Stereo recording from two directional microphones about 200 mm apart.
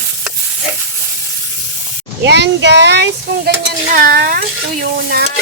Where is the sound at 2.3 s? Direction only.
60° right (ahead or behind).